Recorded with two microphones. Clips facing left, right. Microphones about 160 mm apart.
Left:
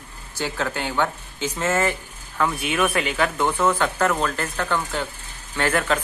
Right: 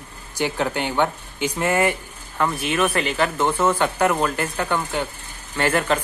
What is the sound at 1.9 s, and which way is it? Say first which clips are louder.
Speech: right 2 dB; centre (ahead or behind).